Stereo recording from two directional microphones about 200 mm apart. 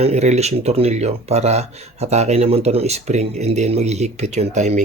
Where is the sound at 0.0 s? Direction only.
35° right (ahead or behind).